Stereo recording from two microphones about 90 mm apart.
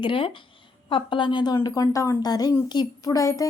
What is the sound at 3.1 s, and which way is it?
Speech, 40° left (ahead or behind).